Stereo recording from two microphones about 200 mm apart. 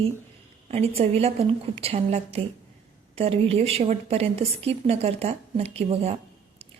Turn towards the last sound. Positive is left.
turn(degrees=-30)  # may be behind; listen again after turning